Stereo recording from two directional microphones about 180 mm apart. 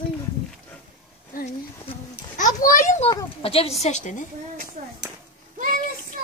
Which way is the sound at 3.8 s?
40° left (ahead or behind).